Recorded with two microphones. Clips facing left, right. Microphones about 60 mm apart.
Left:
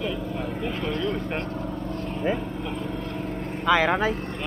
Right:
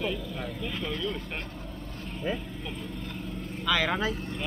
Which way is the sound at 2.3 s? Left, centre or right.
Left.